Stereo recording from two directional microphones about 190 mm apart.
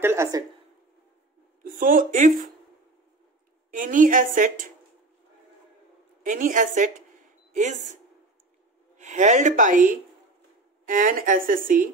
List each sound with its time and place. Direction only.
0.0 s a woman's voice: 15° right (ahead or behind)
1.6 s a woman's voice: 45° right (ahead or behind)
3.7 s a woman's voice: 45° right (ahead or behind)
6.2 s a woman's voice: 45° right (ahead or behind)